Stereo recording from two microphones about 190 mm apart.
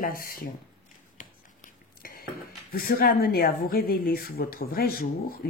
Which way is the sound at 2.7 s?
50° left (ahead or behind).